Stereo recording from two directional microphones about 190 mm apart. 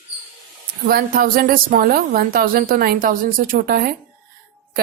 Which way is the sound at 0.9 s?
50° right (ahead or behind).